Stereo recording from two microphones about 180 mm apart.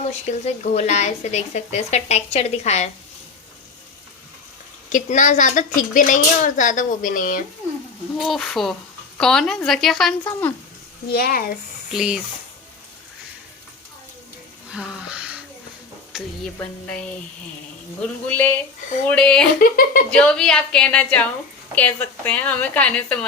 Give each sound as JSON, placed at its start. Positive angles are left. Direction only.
{"t": 0.1, "sound": "speech", "side_deg": 40}
{"t": 4.9, "sound": "speech", "side_deg": 45}
{"t": 8.2, "sound": "a woman's voice", "side_deg": 0}
{"t": 11.1, "sound": "speech", "side_deg": 55}
{"t": 11.9, "sound": "a woman's voice", "side_deg": -5}
{"t": 14.7, "sound": "a sound", "side_deg": -5}
{"t": 16.6, "sound": "a woman's voice", "side_deg": 10}
{"t": 18.3, "sound": "a woman's voice", "side_deg": 10}
{"t": 19.5, "sound": "speech", "side_deg": 55}
{"t": 20.1, "sound": "a woman's voice", "side_deg": 5}